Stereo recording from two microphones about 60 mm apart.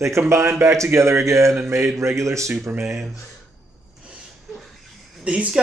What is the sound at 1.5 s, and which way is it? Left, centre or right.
Speech, right.